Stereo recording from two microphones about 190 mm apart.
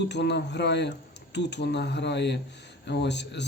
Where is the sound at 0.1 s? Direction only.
65° left (ahead or behind).